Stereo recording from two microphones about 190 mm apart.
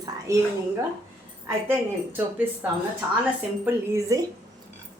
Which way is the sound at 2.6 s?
10° right (ahead or behind).